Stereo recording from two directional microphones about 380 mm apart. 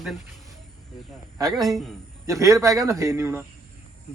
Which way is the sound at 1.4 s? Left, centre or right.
Centre.